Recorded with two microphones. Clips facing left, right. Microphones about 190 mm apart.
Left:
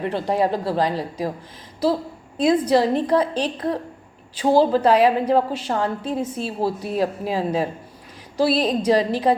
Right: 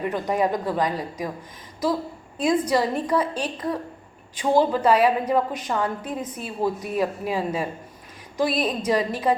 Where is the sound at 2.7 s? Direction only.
35° left (ahead or behind).